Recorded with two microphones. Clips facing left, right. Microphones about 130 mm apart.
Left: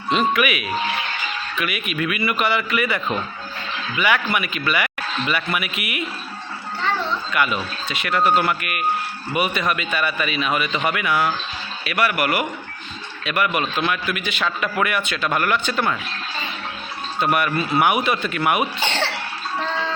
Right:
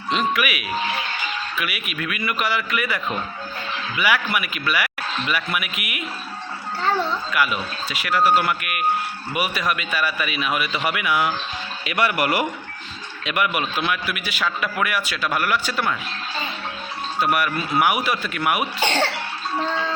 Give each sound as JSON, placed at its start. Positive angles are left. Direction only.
{"t": 0.1, "sound": "a man's voice", "side_deg": 0}
{"t": 7.3, "sound": "a man's voice", "side_deg": -5}
{"t": 11.9, "sound": "speech", "side_deg": -25}
{"t": 13.2, "sound": "a man's voice", "side_deg": -15}
{"t": 17.2, "sound": "a man's voice", "side_deg": 0}